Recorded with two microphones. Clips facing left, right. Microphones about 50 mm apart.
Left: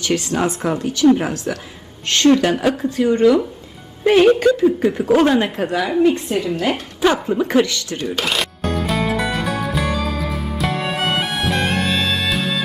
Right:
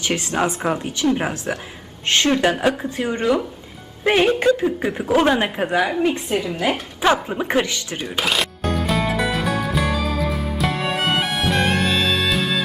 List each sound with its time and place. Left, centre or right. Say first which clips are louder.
0.0 s a woman's voice: left 2 dB; right
6.1 s a woman's voice: left 4 dB; centre
7.3 s speech: left 4 dB; centre
8.0 s music: even; centre